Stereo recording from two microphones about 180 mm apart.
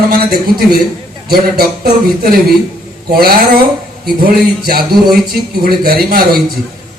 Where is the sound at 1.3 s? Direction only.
55° right (ahead or behind).